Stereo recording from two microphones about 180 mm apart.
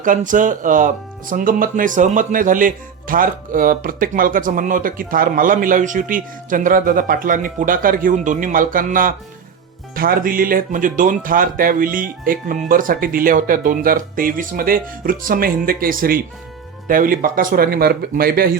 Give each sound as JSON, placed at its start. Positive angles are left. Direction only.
{"t": 0.0, "sound": "speech", "side_deg": -45}